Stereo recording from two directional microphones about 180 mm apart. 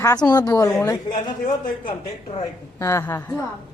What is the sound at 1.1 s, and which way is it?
Speech, 45° left (ahead or behind).